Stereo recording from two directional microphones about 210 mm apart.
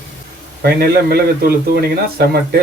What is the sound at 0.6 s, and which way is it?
A man's voice, 50° right (ahead or behind).